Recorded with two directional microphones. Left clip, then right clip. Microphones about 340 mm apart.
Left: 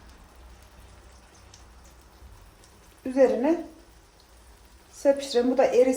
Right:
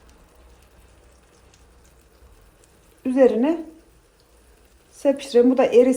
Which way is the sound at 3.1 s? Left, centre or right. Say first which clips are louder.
Right 4 dB; right.